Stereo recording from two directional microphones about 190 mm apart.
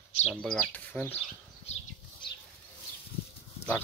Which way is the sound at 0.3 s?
5° left (ahead or behind).